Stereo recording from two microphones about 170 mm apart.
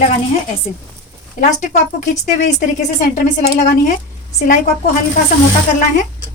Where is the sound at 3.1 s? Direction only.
65° left (ahead or behind).